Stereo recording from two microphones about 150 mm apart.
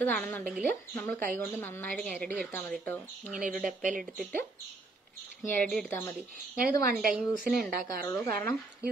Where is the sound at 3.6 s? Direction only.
60° right (ahead or behind).